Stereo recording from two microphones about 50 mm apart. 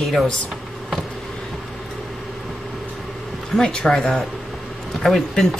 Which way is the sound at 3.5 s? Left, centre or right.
Centre.